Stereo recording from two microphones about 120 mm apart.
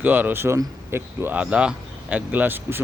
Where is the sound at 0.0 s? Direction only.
15° right (ahead or behind).